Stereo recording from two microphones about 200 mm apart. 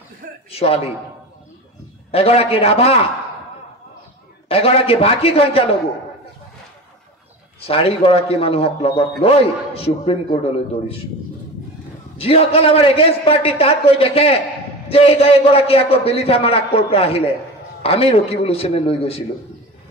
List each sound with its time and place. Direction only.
0.5 s a man's voice: 30° left (ahead or behind)
2.0 s a man's voice: 30° left (ahead or behind)
4.5 s a man's voice: 30° left (ahead or behind)
7.6 s a man's voice: 30° left (ahead or behind)
12.2 s a man's voice: 30° left (ahead or behind)